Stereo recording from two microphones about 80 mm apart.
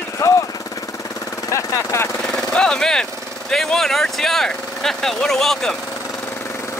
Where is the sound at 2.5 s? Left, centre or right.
Centre.